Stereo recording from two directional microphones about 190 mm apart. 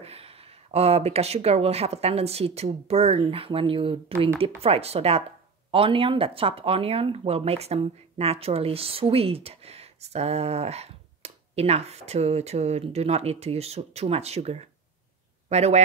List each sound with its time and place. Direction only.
0.0 s speech: 30° right (ahead or behind)